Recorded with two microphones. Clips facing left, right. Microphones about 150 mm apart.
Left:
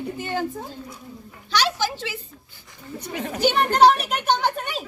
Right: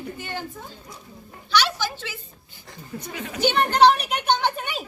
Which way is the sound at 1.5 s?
40° left (ahead or behind).